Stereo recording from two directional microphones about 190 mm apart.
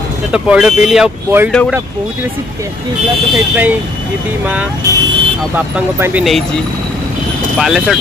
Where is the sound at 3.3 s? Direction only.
10° right (ahead or behind).